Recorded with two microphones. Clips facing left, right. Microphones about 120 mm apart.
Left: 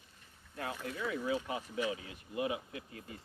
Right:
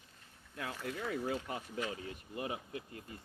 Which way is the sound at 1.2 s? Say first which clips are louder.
Left 2 dB; 45° right (ahead or behind).